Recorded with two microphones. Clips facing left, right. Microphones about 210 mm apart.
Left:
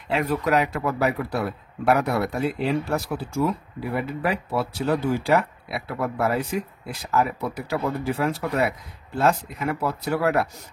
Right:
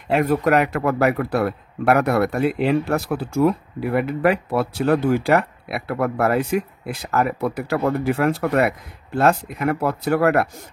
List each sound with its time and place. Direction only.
0.1 s speech: 50° right (ahead or behind)